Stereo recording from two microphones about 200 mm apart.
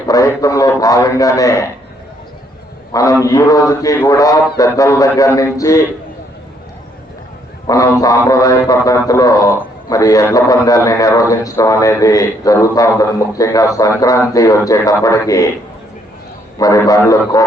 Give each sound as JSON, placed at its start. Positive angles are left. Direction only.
{"t": 0.1, "sound": "speech", "side_deg": 15}
{"t": 2.9, "sound": "speech", "side_deg": 15}
{"t": 7.7, "sound": "speech", "side_deg": 15}
{"t": 16.6, "sound": "speech", "side_deg": 15}